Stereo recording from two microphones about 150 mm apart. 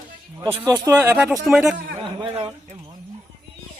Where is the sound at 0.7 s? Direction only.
15° right (ahead or behind).